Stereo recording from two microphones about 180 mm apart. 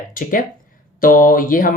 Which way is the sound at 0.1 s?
50° left (ahead or behind).